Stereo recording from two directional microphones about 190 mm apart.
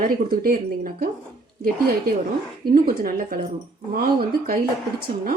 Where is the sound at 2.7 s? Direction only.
50° right (ahead or behind).